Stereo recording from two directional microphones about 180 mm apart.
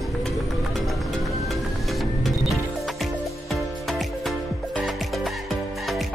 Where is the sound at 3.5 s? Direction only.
Centre (ahead or behind).